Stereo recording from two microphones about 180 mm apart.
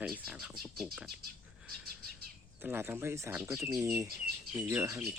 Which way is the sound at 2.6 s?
10° right (ahead or behind).